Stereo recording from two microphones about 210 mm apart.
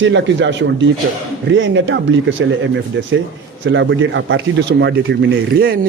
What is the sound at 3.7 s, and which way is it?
A man's voice, 60° right (ahead or behind).